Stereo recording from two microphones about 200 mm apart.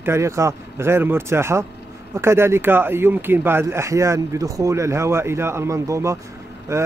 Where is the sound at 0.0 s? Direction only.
15° right (ahead or behind).